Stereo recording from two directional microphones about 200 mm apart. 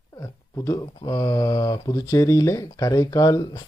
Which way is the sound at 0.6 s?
20° left (ahead or behind).